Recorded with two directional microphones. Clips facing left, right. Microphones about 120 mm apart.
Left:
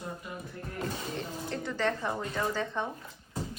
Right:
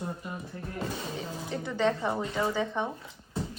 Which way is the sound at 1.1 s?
15° right (ahead or behind).